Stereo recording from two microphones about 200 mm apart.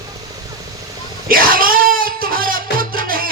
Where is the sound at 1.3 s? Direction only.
45° right (ahead or behind).